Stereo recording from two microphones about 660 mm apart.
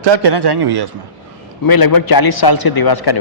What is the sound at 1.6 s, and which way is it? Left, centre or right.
Speech, left.